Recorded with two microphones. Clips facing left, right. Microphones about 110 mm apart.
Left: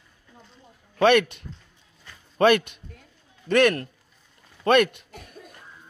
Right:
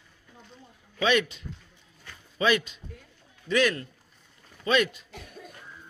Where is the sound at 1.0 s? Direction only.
60° left (ahead or behind).